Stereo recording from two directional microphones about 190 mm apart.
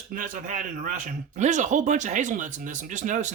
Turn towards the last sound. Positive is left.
turn(degrees=-40)  # may be behind; listen again after turning